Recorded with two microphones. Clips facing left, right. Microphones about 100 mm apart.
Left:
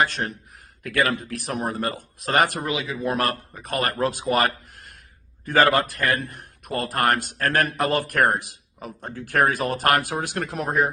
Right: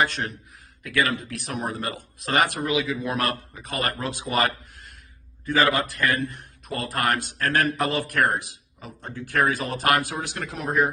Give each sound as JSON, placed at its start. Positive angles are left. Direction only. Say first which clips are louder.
{"t": 0.0, "sound": "speech", "louder": "left 1 dB", "side_deg": 40}
{"t": 3.5, "sound": "a man's voice", "louder": "left 3 dB", "side_deg": 45}